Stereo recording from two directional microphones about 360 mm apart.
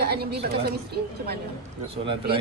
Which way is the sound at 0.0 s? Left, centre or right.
Right.